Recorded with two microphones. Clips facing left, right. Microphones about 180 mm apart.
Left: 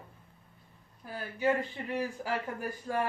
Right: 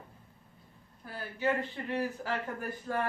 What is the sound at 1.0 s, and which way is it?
A woman's voice, 15° left (ahead or behind).